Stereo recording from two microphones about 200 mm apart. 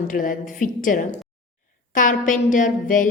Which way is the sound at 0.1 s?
40° left (ahead or behind).